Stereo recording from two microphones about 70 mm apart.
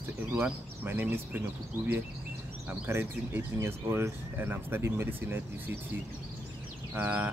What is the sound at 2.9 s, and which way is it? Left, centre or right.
Speech, right.